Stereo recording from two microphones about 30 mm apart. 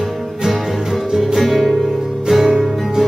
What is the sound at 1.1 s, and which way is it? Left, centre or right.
Music, centre.